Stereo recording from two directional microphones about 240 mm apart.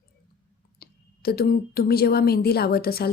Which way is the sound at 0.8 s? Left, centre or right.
Left.